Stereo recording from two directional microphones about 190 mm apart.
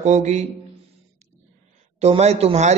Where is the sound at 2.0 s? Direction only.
35° right (ahead or behind).